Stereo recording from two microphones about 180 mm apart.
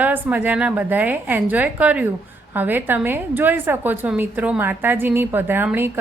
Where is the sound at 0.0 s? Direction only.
10° right (ahead or behind).